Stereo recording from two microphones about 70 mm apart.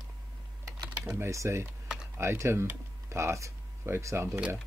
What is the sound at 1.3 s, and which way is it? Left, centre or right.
Speech, right.